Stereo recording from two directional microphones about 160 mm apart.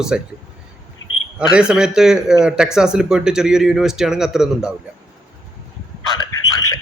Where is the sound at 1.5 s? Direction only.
5° right (ahead or behind).